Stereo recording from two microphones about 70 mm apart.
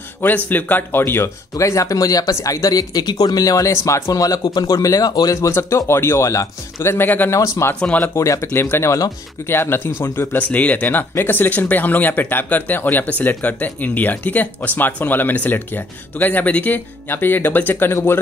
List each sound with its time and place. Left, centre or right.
0.5 s speech: left
1.6 s speech: left
3.7 s speech: left
5.3 s speech: left
7.2 s speech: left
7.8 s speech: left
8.2 s speech: left
8.5 s speech: left